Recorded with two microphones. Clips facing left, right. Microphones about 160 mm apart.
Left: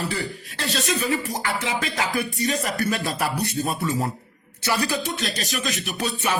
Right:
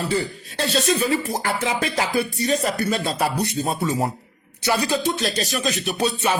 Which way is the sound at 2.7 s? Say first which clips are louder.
Right 2 dB; 20° right (ahead or behind).